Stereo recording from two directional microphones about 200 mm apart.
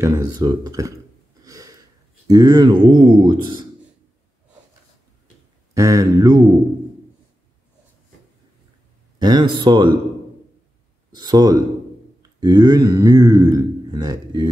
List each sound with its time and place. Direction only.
0.0 s speech: 20° right (ahead or behind)
1.4 s a sound: 15° right (ahead or behind)
2.2 s speech: 20° right (ahead or behind)
5.8 s speech: 15° right (ahead or behind)
9.2 s speech: 20° right (ahead or behind)
11.1 s speech: 20° right (ahead or behind)
12.2 s a sound: 20° right (ahead or behind)